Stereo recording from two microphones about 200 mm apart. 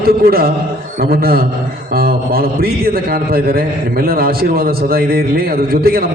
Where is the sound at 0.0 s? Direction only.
50° right (ahead or behind).